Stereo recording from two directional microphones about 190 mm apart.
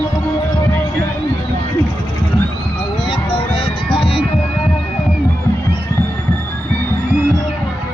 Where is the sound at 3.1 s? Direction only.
30° left (ahead or behind).